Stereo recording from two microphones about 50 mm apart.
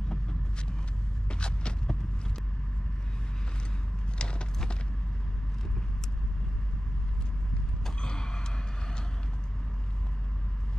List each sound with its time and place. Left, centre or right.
0.1 s vehicle: centre
1.3 s hum: centre
4.2 s a sound: centre
7.8 s gasp: centre